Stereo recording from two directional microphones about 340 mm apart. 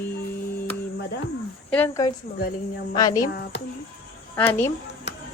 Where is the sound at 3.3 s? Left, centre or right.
Left.